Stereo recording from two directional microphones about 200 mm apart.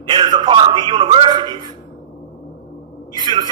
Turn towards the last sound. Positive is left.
turn(degrees=-20)  # may be behind; listen again after turning